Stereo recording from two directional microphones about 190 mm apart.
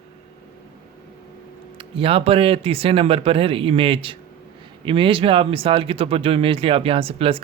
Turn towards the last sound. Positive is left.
turn(degrees=-30)  # may be behind; listen again after turning